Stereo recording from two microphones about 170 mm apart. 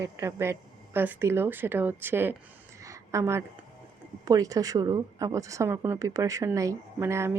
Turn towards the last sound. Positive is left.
turn(degrees=-15)  # may be behind; listen again after turning